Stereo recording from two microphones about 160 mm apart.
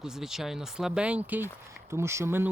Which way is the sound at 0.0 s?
5° right (ahead or behind).